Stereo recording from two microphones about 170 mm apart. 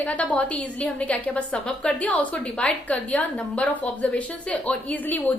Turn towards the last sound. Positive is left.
turn(degrees=10)  # may be behind; listen again after turning